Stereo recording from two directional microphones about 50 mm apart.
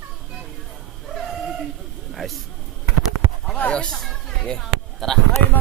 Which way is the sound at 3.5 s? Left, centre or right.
Left.